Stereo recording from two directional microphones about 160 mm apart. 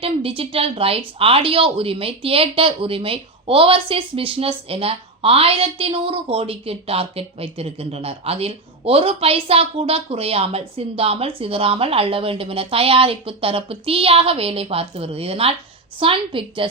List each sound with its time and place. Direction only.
0.0 s a woman's voice: 35° right (ahead or behind)